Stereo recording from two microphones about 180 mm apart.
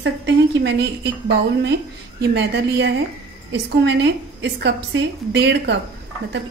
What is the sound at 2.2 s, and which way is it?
A woman's voice, 70° right (ahead or behind).